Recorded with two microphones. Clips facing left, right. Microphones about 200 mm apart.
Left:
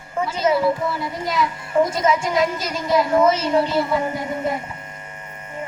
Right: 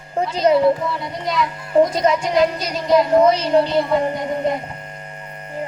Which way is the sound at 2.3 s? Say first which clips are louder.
Right 3 dB; centre (ahead or behind).